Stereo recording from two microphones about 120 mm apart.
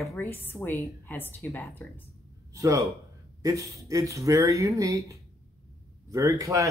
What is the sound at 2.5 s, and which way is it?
A man's voice, 25° right (ahead or behind).